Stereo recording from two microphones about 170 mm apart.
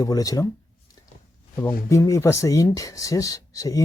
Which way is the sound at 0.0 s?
20° left (ahead or behind).